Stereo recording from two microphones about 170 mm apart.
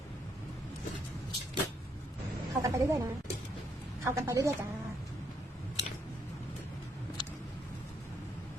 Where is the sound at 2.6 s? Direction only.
20° right (ahead or behind).